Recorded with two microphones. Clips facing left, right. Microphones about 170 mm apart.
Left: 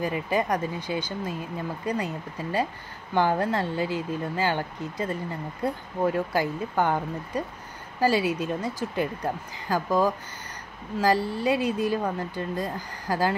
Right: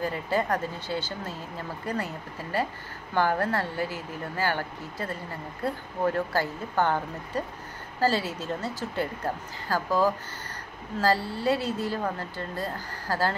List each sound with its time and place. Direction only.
0.0 s a woman's voice: 15° left (ahead or behind)